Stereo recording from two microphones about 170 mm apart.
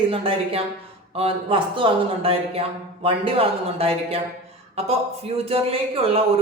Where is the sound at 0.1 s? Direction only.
30° right (ahead or behind).